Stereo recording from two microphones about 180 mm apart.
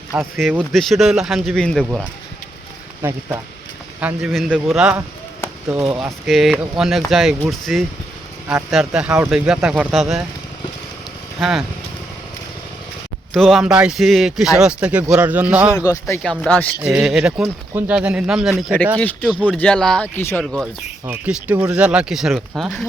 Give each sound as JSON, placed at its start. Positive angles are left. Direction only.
{"t": 0.1, "sound": "speech", "side_deg": -5}
{"t": 3.0, "sound": "speech", "side_deg": -15}
{"t": 4.0, "sound": "speech", "side_deg": 0}
{"t": 11.3, "sound": "speech", "side_deg": 0}
{"t": 13.3, "sound": "speech", "side_deg": 0}
{"t": 15.9, "sound": "speech", "side_deg": 15}
{"t": 16.2, "sound": "speech", "side_deg": 0}
{"t": 19.4, "sound": "speech", "side_deg": 10}
{"t": 20.4, "sound": "speech", "side_deg": 0}